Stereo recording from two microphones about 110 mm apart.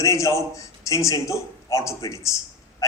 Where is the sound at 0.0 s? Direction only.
30° left (ahead or behind).